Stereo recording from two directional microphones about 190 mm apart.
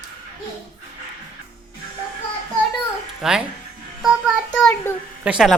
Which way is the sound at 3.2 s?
5° right (ahead or behind).